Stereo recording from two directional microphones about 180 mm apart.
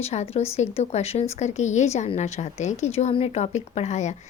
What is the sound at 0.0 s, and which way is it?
A woman's voice, 35° left (ahead or behind).